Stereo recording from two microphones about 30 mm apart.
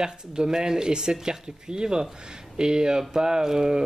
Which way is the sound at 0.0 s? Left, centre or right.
Right.